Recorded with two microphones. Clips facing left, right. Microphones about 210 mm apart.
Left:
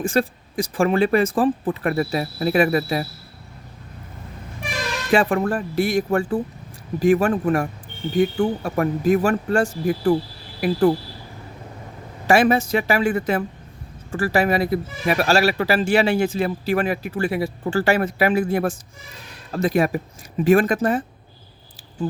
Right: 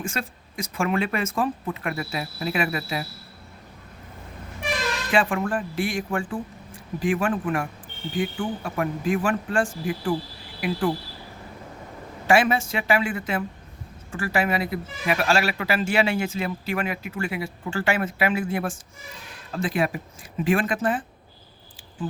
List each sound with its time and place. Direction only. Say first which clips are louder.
0.0 s speech: left 10 dB; 35° left (ahead or behind)
5.1 s speech: left 5 dB; 40° left (ahead or behind)
12.3 s speech: left 4 dB; 40° left (ahead or behind)